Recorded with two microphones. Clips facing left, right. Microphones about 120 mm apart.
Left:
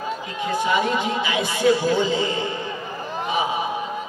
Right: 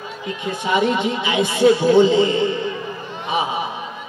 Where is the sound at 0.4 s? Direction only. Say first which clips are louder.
Right 2 dB; 20° right (ahead or behind).